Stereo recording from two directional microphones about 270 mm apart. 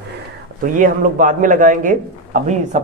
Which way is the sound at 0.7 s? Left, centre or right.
Right.